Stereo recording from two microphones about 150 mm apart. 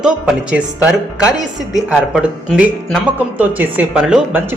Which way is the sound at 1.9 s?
10° right (ahead or behind).